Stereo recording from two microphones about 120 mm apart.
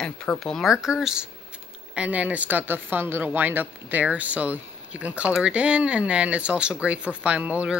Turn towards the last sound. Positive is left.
turn(degrees=-10)  # may be behind; listen again after turning